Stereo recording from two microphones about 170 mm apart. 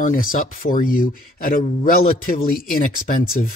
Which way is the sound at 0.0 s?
50° left (ahead or behind).